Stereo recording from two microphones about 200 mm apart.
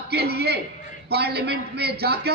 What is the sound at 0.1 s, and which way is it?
A man's voice, 55° right (ahead or behind).